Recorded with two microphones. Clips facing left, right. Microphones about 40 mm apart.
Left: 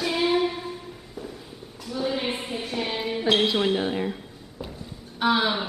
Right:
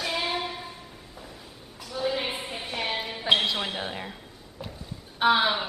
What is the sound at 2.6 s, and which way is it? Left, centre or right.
Music, centre.